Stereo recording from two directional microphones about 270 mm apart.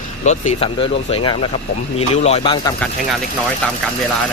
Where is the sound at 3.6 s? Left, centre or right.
Centre.